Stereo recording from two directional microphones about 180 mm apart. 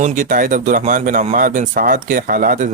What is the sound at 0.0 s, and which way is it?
A man's voice, 45° right (ahead or behind).